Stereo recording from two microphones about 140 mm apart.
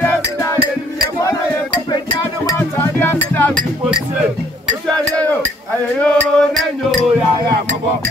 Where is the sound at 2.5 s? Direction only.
15° left (ahead or behind).